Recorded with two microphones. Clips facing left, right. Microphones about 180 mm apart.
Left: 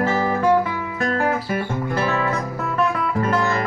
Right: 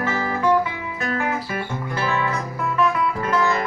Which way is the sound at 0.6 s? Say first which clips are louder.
Left 3 dB; 45° left (ahead or behind).